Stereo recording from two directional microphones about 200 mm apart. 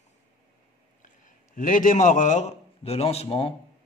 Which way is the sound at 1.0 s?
40° left (ahead or behind).